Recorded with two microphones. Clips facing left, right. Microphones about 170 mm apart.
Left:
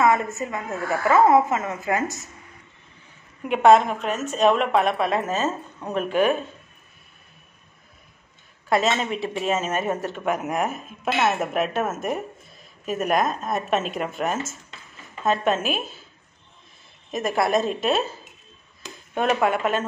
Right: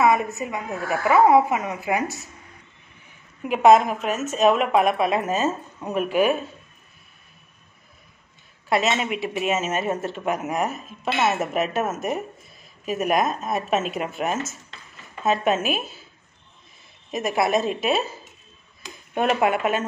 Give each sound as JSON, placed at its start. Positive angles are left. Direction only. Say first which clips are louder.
{"t": 0.0, "sound": "a sound", "louder": "right 1 dB", "side_deg": -15}
{"t": 0.4, "sound": "a woman's voice", "louder": "even", "side_deg": -15}
{"t": 3.4, "sound": "a woman's voice", "louder": "even", "side_deg": -5}
{"t": 8.6, "sound": "a woman's voice", "louder": "left 1 dB", "side_deg": -10}
{"t": 17.1, "sound": "a woman's voice", "louder": "even", "side_deg": -5}
{"t": 19.1, "sound": "a woman's voice", "louder": "right 1 dB", "side_deg": -10}